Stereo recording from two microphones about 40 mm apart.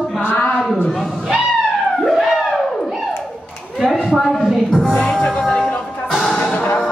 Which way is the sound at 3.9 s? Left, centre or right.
Centre.